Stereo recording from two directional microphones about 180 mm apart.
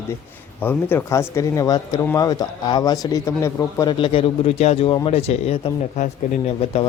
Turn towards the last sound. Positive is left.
turn(degrees=35)  # may be behind; listen again after turning